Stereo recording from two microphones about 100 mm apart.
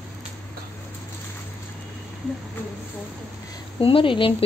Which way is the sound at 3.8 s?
60° left (ahead or behind).